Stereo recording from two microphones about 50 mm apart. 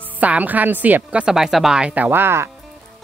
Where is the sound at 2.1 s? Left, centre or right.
Right.